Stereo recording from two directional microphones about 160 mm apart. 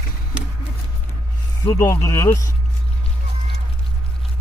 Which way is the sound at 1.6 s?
20° left (ahead or behind).